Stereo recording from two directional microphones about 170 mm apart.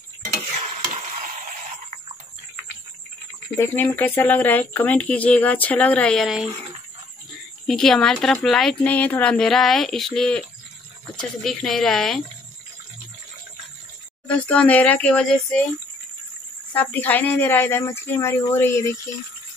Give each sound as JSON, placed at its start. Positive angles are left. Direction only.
{"t": 1.1, "sound": "a sound", "side_deg": -50}
{"t": 3.5, "sound": "speech", "side_deg": 10}
{"t": 7.6, "sound": "speech", "side_deg": 5}
{"t": 14.2, "sound": "speech", "side_deg": 5}
{"t": 16.7, "sound": "speech", "side_deg": 10}